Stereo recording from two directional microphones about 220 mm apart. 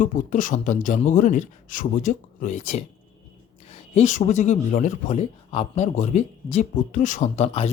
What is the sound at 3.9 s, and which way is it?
Speech, 35° left (ahead or behind).